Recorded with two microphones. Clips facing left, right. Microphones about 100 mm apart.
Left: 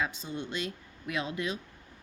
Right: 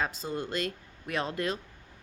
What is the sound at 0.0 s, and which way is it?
A woman's voice, 40° right (ahead or behind).